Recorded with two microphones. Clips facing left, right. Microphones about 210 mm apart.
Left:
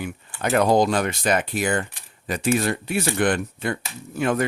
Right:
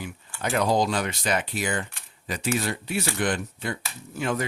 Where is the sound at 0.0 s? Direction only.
55° left (ahead or behind).